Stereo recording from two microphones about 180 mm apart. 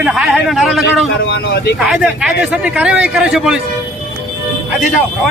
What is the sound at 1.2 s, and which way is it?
Speech, 70° left (ahead or behind).